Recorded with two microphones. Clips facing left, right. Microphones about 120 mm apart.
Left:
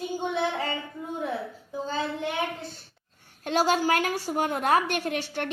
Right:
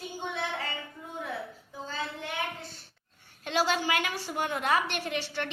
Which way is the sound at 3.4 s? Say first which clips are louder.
Left 4 dB; 45° left (ahead or behind).